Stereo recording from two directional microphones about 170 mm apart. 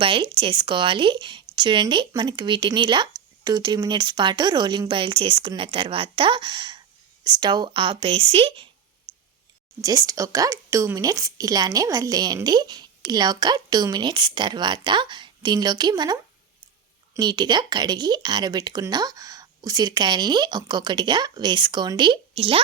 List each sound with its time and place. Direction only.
0.0 s speech: 30° right (ahead or behind)
9.8 s speech: 20° right (ahead or behind)
17.2 s speech: 25° right (ahead or behind)